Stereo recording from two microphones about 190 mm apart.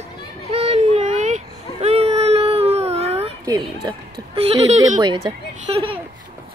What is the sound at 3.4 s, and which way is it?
Speech, 20° right (ahead or behind).